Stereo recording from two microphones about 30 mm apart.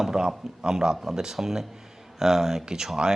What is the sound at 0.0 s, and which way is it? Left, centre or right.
Speech, centre.